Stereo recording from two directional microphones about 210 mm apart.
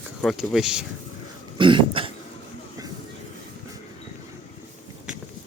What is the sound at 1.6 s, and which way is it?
Throat clearing, 25° right (ahead or behind).